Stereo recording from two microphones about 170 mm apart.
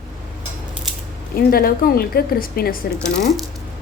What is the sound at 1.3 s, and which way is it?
A woman's voice, 60° left (ahead or behind).